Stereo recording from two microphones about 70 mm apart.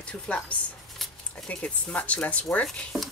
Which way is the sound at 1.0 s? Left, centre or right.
Centre.